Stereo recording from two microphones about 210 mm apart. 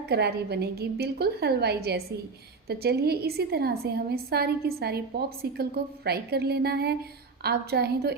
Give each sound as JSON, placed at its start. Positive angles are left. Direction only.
{"t": 0.1, "sound": "a woman's voice", "side_deg": -50}